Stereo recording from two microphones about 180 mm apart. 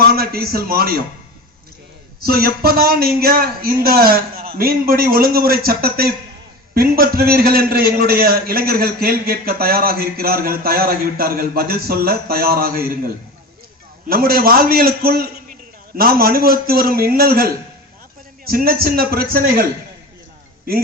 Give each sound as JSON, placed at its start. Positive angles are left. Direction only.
{"t": 0.1, "sound": "a man's voice", "side_deg": -55}
{"t": 2.2, "sound": "a man's voice", "side_deg": -55}
{"t": 14.1, "sound": "a man's voice", "side_deg": -55}